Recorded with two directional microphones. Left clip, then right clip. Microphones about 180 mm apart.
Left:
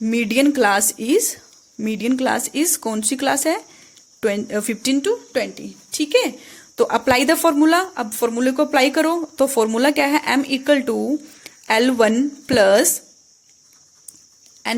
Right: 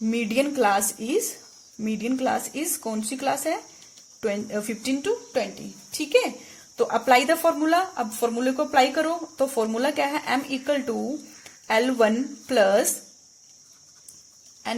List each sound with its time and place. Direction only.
0.0 s speech: 40° left (ahead or behind)